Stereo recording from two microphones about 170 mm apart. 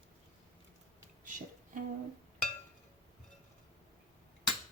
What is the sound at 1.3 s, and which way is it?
Music, 50° right (ahead or behind).